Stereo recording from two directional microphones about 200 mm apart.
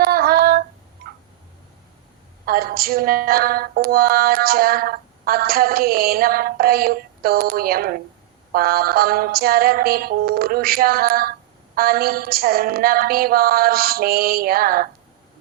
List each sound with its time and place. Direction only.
0.0 s female singing: 50° right (ahead or behind)
2.5 s music: 50° right (ahead or behind)